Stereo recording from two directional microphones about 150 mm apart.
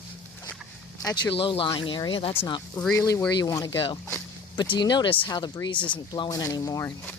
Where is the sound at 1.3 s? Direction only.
35° left (ahead or behind).